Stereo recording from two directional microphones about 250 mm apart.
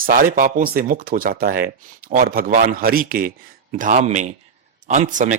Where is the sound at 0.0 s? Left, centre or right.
Right.